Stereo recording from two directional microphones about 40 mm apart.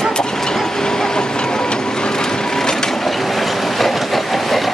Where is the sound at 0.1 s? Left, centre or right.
Centre.